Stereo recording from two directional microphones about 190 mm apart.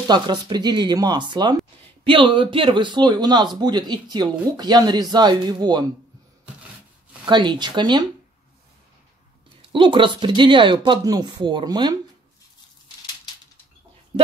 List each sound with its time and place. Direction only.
0.1 s a man's voice: 20° right (ahead or behind)
7.2 s a man's voice: 25° right (ahead or behind)
9.6 s a man's voice: 25° right (ahead or behind)